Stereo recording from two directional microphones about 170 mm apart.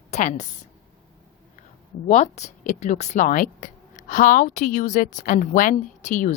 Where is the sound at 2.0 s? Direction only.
45° left (ahead or behind).